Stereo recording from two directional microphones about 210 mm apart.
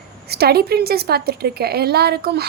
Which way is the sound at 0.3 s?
50° right (ahead or behind).